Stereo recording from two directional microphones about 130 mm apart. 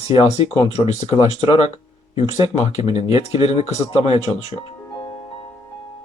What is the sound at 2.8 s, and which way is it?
Speech, 50° left (ahead or behind).